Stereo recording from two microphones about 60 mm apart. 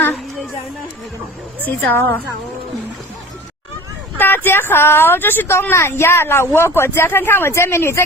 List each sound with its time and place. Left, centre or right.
1.6 s a woman's voice: left
4.2 s a woman's voice: left